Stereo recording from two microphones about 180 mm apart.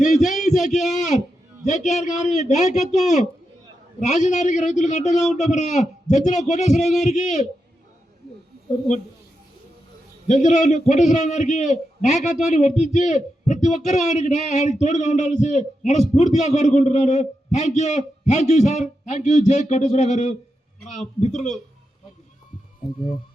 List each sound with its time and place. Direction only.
0.0 s a sound: 45° left (ahead or behind)
0.9 s a man's voice: 40° left (ahead or behind)
10.2 s a man's voice: 40° left (ahead or behind)